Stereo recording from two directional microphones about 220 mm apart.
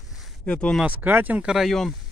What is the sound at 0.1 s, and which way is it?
Speech, centre (ahead or behind).